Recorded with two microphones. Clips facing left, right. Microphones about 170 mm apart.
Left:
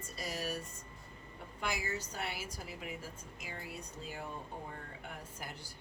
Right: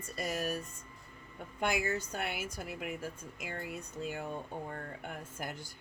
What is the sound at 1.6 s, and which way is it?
A woman's voice, 60° right (ahead or behind).